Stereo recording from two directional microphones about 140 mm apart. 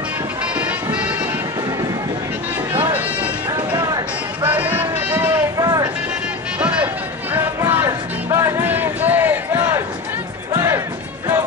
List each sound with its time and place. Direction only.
3.7 s a sound: 30° right (ahead or behind)
4.4 s music: 10° right (ahead or behind)
7.3 s music: 15° right (ahead or behind)